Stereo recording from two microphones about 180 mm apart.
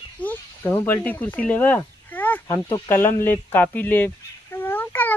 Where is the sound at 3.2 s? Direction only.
10° left (ahead or behind).